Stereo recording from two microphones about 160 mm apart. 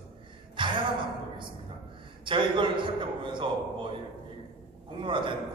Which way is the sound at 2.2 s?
30° right (ahead or behind).